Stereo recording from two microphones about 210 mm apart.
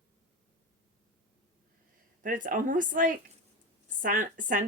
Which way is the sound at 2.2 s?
40° right (ahead or behind).